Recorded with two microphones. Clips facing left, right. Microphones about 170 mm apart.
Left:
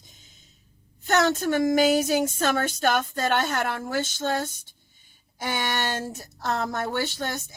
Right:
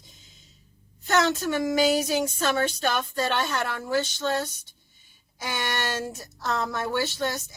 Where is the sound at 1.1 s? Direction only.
50° left (ahead or behind).